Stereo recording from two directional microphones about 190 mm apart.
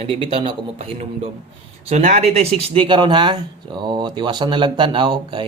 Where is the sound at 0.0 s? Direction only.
25° right (ahead or behind).